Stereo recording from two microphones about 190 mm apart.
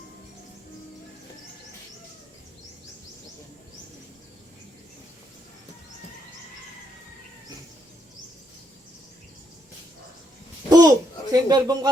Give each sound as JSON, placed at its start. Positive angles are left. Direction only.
{"t": 10.8, "sound": "a child's voice", "side_deg": -20}